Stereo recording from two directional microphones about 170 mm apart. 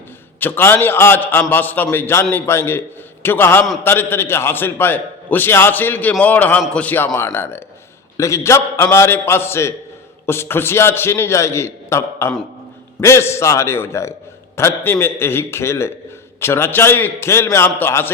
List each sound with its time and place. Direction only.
0.3 s a man's voice: 10° left (ahead or behind)